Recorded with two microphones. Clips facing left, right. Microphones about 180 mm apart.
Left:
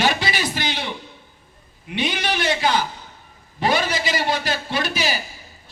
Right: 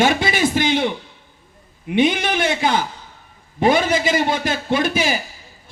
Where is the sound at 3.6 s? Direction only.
50° right (ahead or behind).